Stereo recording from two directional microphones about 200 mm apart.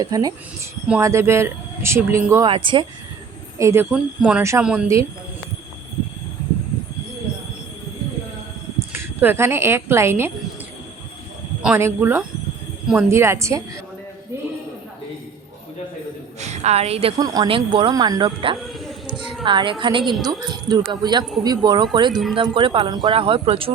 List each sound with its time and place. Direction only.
0.0 s a woman's voice: 20° right (ahead or behind)
2.5 s a woman's voice: 25° right (ahead or behind)
3.6 s speech: 15° right (ahead or behind)
3.9 s speech: 5° right (ahead or behind)
8.9 s speech: 10° right (ahead or behind)
11.6 s speech: 10° right (ahead or behind)
16.4 s a woman's voice: 35° right (ahead or behind)
19.0 s a sound: 25° right (ahead or behind)
19.8 s a woman's voice: 25° right (ahead or behind)
22.1 s speech: centre (ahead or behind)
22.4 s a woman's voice: 25° right (ahead or behind)